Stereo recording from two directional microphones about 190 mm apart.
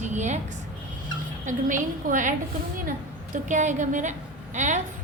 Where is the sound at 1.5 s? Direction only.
45° right (ahead or behind).